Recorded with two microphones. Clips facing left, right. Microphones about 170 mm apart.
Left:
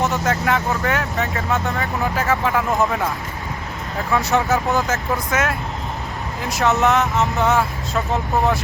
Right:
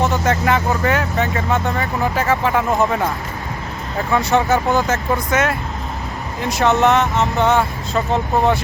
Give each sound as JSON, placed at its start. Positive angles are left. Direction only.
{"t": 0.0, "sound": "speech", "side_deg": 0}
{"t": 4.1, "sound": "speech", "side_deg": 0}